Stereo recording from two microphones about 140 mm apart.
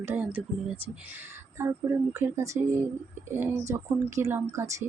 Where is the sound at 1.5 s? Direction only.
20° right (ahead or behind).